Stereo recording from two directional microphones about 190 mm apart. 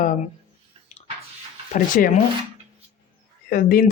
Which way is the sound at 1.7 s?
45° left (ahead or behind).